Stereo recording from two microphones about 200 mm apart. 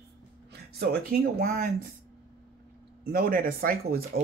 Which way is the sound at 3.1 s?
45° right (ahead or behind).